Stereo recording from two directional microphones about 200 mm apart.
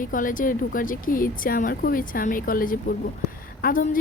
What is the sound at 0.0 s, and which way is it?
A woman's voice, 40° left (ahead or behind).